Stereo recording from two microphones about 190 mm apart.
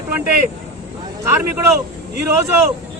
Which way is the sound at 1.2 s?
15° right (ahead or behind).